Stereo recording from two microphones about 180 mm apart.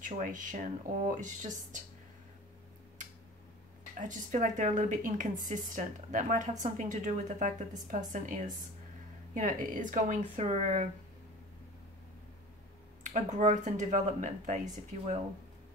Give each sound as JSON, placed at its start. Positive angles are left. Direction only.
{"t": 0.0, "sound": "a woman's voice", "side_deg": -45}
{"t": 4.0, "sound": "a woman's voice", "side_deg": -45}
{"t": 13.0, "sound": "a woman's voice", "side_deg": -45}